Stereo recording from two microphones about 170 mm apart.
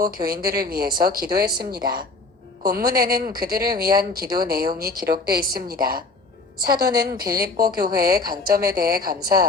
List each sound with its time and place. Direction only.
0.0 s speech: 60° right (ahead or behind)
2.6 s speech: 60° right (ahead or behind)